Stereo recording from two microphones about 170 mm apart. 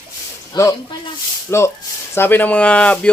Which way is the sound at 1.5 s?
15° left (ahead or behind).